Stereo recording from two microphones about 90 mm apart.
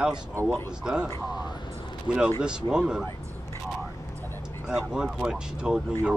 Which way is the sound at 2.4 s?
10° right (ahead or behind).